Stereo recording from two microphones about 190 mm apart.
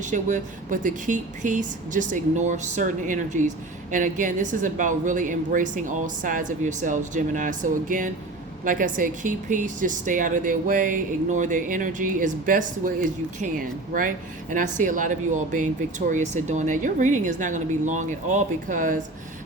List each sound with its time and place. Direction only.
0.0 s speech: 40° right (ahead or behind)